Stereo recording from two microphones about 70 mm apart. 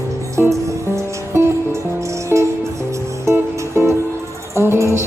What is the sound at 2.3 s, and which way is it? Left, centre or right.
Music, right.